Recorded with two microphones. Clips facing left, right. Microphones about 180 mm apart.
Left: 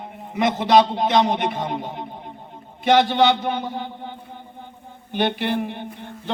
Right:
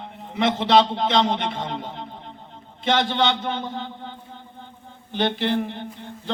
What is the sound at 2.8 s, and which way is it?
A man's voice, 15° left (ahead or behind).